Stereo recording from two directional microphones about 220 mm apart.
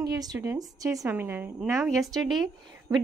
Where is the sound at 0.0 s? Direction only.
15° right (ahead or behind).